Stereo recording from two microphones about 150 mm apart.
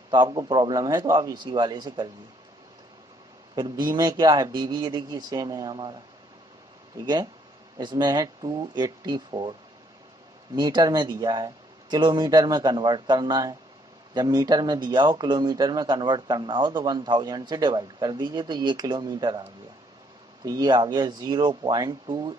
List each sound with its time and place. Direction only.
0.1 s speech: 30° right (ahead or behind)
3.5 s speech: 30° right (ahead or behind)
7.7 s speech: 30° right (ahead or behind)
20.4 s speech: 25° right (ahead or behind)